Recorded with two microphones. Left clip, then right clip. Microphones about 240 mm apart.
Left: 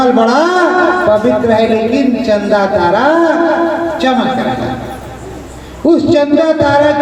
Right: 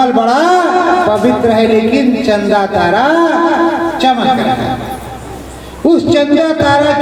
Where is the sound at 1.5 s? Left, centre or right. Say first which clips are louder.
Right 1 dB; right.